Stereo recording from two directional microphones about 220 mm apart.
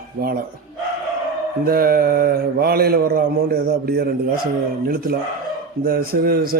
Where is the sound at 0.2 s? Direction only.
45° right (ahead or behind).